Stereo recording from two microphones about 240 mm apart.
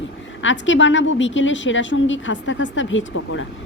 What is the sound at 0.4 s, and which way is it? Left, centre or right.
A woman's voice, left.